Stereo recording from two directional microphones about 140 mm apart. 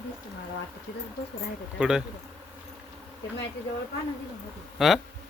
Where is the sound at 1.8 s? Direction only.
5° right (ahead or behind).